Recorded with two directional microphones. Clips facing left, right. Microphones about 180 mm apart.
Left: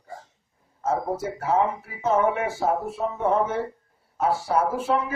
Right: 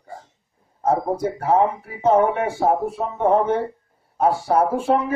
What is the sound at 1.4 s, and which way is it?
Music, 35° right (ahead or behind).